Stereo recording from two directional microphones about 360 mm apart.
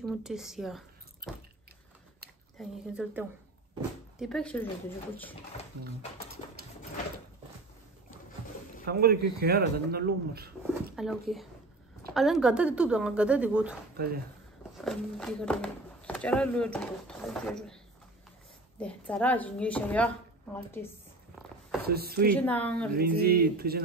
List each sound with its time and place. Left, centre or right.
0.0 s speech: centre
2.6 s speech: centre
8.8 s speech: right
11.0 s speech: centre
14.8 s speech: centre
18.8 s a woman's voice: centre
21.8 s speech: right
22.3 s speech: centre
22.9 s speech: right